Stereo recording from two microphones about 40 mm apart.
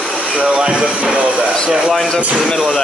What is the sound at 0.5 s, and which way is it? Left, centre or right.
Speech, right.